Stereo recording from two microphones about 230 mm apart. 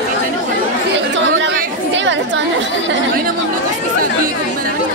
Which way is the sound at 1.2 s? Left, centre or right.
Right.